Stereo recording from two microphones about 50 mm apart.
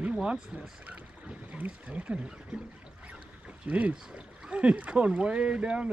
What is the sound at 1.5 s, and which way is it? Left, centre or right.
Speech, right.